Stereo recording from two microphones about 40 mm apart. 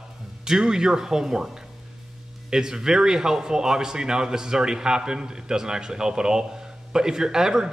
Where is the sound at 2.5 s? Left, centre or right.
Centre.